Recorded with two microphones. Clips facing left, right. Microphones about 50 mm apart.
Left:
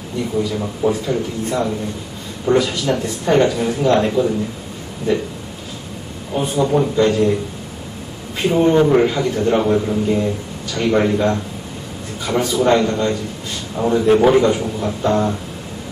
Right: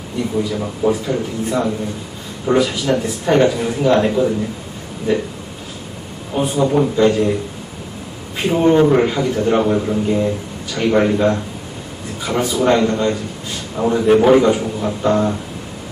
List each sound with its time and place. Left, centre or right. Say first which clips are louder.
0.6 s speech: right 1 dB; centre
6.3 s a man's voice: right 1 dB; centre
8.4 s a man's voice: right 1 dB; centre